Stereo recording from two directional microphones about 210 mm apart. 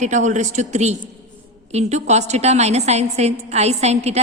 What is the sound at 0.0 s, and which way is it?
A woman's voice, 35° right (ahead or behind).